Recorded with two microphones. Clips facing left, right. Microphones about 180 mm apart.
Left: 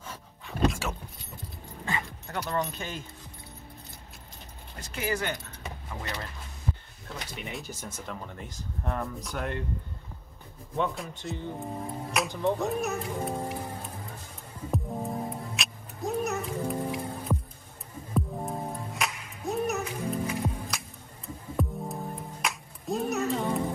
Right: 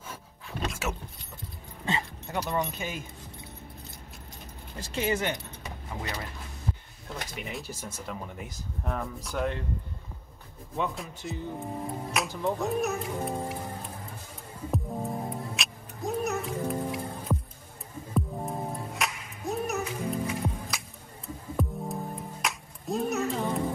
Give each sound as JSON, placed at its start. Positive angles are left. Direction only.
{"t": 0.1, "sound": "pant", "side_deg": 0}
{"t": 1.9, "sound": "dog", "side_deg": -20}
{"t": 2.6, "sound": "speech", "side_deg": -10}
{"t": 4.7, "sound": "speech", "side_deg": -30}
{"t": 7.4, "sound": "speech", "side_deg": 0}
{"t": 10.8, "sound": "speech", "side_deg": 0}
{"t": 14.7, "sound": "music", "side_deg": 0}